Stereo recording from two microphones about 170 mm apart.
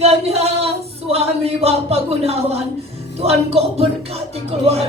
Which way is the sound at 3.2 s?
35° right (ahead or behind).